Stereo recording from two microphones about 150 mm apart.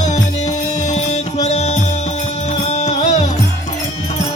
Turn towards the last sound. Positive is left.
turn(degrees=50)  # may be behind; listen again after turning